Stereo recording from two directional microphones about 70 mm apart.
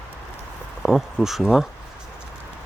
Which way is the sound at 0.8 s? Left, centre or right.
Centre.